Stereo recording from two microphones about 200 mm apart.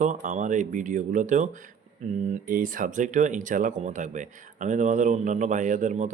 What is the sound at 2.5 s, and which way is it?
Speech, 45° right (ahead or behind).